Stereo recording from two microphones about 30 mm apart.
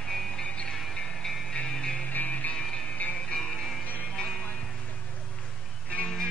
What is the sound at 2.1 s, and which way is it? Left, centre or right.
Music, left.